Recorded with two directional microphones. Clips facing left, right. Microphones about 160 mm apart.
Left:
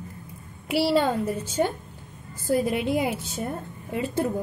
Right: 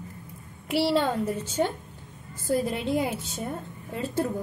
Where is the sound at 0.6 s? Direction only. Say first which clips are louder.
Left 2 dB; 5° left (ahead or behind).